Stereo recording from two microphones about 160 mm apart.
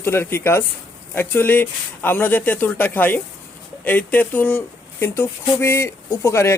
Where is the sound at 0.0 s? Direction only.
15° left (ahead or behind).